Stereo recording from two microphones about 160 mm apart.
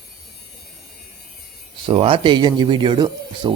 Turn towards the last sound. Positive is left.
turn(degrees=-30)  # may be behind; listen again after turning